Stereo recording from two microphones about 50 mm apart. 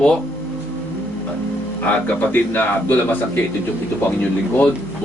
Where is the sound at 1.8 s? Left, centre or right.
Left.